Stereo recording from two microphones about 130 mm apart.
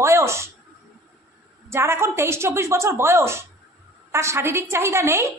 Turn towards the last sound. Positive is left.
turn(degrees=-20)  # may be behind; listen again after turning